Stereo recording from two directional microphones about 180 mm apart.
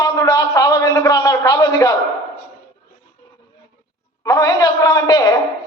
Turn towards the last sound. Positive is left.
turn(degrees=20)  # may be behind; listen again after turning